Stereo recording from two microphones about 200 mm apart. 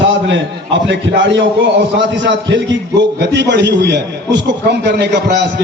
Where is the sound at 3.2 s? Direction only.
60° right (ahead or behind).